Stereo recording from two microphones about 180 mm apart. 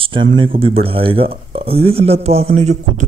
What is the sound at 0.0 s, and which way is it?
Speech, 30° right (ahead or behind).